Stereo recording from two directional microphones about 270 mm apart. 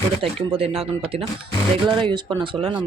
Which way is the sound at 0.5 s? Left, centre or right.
Right.